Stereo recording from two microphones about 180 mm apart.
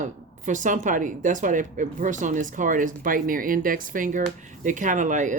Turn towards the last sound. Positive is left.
turn(degrees=-45)  # may be behind; listen again after turning